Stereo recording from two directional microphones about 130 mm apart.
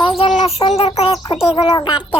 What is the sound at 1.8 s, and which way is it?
Speech, 40° left (ahead or behind).